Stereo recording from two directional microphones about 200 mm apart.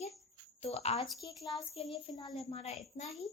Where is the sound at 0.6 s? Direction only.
30° left (ahead or behind).